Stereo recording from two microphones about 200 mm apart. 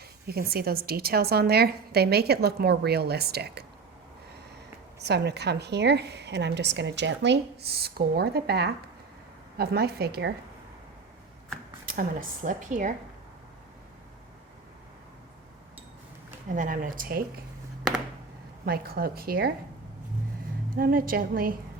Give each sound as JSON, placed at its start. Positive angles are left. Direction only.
{"t": 0.3, "sound": "a woman's voice", "side_deg": -50}
{"t": 4.9, "sound": "a woman's voice", "side_deg": -55}
{"t": 11.9, "sound": "speech", "side_deg": -45}
{"t": 16.6, "sound": "a woman's voice", "side_deg": -40}
{"t": 18.6, "sound": "a woman's voice", "side_deg": -50}
{"t": 20.7, "sound": "a woman's voice", "side_deg": -45}